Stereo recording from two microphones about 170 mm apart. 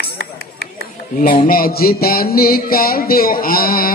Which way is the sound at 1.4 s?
60° left (ahead or behind).